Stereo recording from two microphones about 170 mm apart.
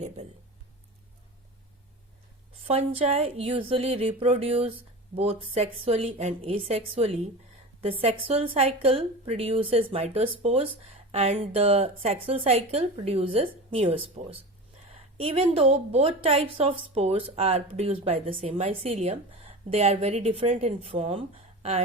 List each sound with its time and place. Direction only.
2.6 s a woman's voice: 35° right (ahead or behind)